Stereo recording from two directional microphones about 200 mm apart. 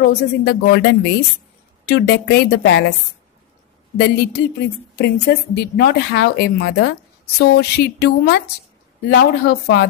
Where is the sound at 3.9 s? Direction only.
55° left (ahead or behind).